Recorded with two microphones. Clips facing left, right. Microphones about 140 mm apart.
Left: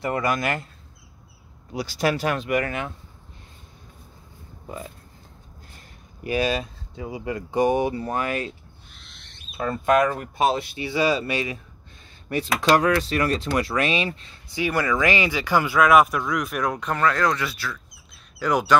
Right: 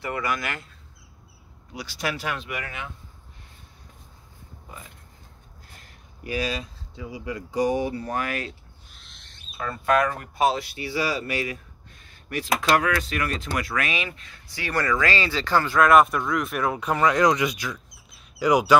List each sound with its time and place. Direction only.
0.0 s speech: 40° left (ahead or behind)
1.7 s speech: 40° left (ahead or behind)
6.2 s speech: 60° left (ahead or behind)
7.8 s speech: 25° left (ahead or behind)
9.6 s speech: 25° left (ahead or behind)
12.7 s speech: 30° left (ahead or behind)
14.6 s speech: 10° left (ahead or behind)
15.8 s speech: centre (ahead or behind); by 17.7 s 15° right (ahead or behind)
18.1 s quack: 10° right (ahead or behind)